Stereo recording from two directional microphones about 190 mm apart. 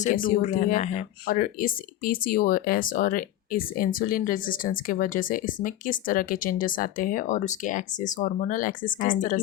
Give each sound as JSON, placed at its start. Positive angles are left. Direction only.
{"t": 0.0, "sound": "speech", "side_deg": 45}